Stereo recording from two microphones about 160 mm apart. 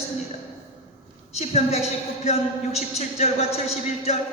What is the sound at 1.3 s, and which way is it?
Speech, 40° left (ahead or behind).